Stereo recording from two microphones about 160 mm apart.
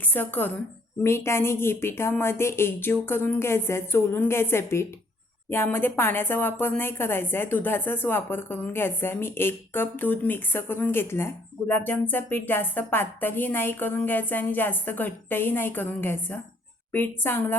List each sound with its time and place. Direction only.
0.0 s a woman's voice: 10° left (ahead or behind)